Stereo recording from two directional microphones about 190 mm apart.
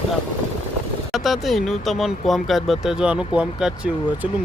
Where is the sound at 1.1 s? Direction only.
Centre (ahead or behind).